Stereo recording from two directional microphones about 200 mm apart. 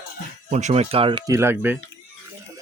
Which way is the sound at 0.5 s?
35° right (ahead or behind).